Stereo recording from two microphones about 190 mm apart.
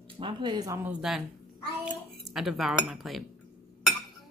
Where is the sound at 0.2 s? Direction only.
25° right (ahead or behind).